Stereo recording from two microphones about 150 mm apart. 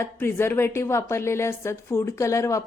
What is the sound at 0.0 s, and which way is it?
Speech, 15° left (ahead or behind).